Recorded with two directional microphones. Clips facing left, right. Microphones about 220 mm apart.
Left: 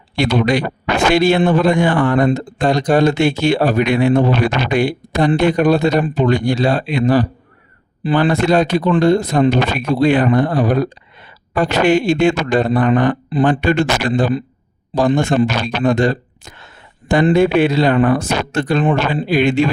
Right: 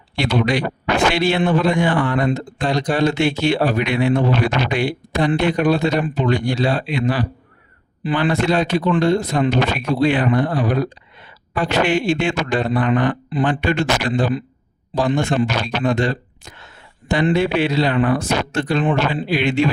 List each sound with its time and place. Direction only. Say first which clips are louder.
0.2 s speech: left 3 dB; 45° left (ahead or behind)